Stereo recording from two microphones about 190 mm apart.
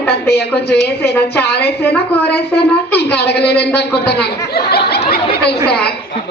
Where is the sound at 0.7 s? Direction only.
60° left (ahead or behind).